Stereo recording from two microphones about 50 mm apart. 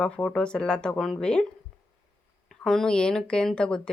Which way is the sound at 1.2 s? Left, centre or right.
Left.